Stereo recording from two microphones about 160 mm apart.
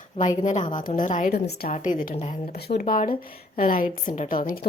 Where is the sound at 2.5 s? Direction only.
85° left.